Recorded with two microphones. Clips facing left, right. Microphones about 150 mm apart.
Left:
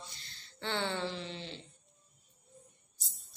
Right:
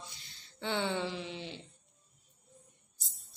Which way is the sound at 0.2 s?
10° right (ahead or behind).